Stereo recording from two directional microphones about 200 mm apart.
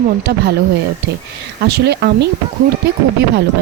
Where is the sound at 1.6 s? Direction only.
55° right (ahead or behind).